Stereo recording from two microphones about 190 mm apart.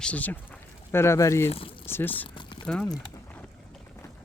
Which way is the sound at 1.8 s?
10° left (ahead or behind).